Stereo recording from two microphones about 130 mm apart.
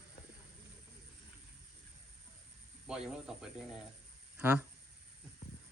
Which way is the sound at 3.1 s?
5° right (ahead or behind).